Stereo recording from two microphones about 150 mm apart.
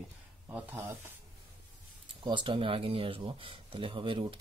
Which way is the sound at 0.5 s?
10° right (ahead or behind).